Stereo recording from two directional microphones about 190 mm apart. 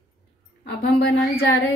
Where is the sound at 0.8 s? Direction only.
60° left (ahead or behind).